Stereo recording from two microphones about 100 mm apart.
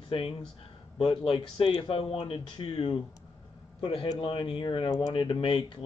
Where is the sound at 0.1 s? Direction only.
70° left (ahead or behind).